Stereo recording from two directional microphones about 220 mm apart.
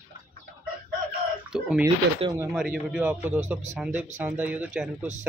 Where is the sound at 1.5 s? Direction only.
5° right (ahead or behind).